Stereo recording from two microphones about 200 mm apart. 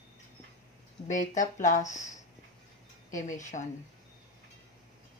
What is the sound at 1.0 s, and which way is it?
Speech, 35° left (ahead or behind).